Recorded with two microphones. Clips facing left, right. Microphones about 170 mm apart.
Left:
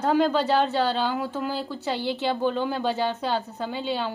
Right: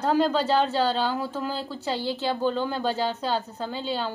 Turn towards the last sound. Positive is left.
turn(degrees=0)  # may be behind; listen again after turning